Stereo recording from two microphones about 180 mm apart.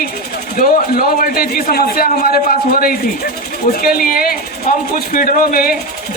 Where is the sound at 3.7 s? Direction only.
55° left (ahead or behind).